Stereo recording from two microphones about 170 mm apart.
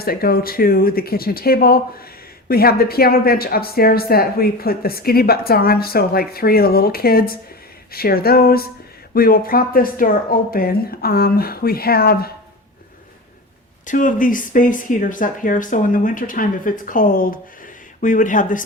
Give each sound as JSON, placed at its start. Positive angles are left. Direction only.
{"t": 0.0, "sound": "a woman's voice", "side_deg": 60}
{"t": 13.8, "sound": "speech", "side_deg": 50}